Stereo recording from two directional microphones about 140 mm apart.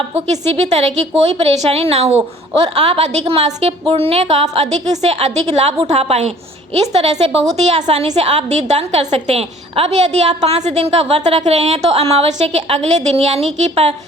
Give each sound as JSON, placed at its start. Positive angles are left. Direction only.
{"t": 0.1, "sound": "a woman's voice", "side_deg": -50}